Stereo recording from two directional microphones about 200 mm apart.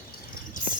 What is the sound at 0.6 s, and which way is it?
Clip-clop, 40° left (ahead or behind).